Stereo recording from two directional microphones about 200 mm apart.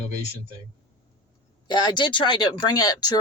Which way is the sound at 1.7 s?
20° left (ahead or behind).